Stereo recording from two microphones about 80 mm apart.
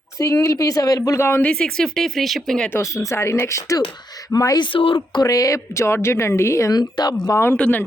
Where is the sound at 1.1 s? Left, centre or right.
Left.